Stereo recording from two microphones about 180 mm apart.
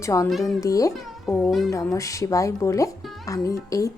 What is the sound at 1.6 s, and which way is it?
A woman's voice, 20° left (ahead or behind).